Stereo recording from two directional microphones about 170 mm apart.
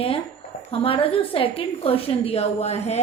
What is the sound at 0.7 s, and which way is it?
A woman's voice, 35° left (ahead or behind).